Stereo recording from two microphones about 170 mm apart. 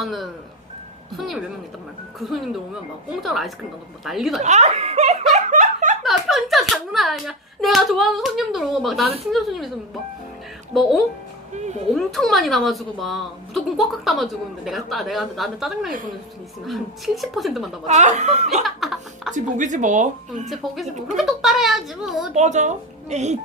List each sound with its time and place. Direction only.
0.0 s a woman's voice: centre (ahead or behind)
4.4 s speech: 40° right (ahead or behind)
5.3 s laughter: 50° right (ahead or behind)
6.0 s a woman's voice: centre (ahead or behind)
11.5 s a woman's voice: 45° right (ahead or behind)
11.9 s a woman's voice: centre (ahead or behind)
17.8 s a woman's voice: 45° right (ahead or behind)
18.6 s a woman's voice: centre (ahead or behind)
19.3 s a woman's voice: 45° right (ahead or behind)
21.2 s a woman's voice: centre (ahead or behind)
22.4 s a woman's voice: 45° right (ahead or behind)